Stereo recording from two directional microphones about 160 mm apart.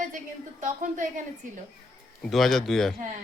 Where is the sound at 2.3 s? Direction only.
Centre (ahead or behind).